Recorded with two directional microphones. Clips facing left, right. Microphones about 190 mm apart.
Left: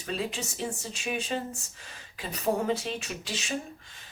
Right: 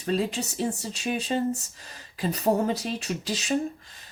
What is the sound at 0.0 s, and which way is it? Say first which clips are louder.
Speech: right 6 dB; 40° right (ahead or behind).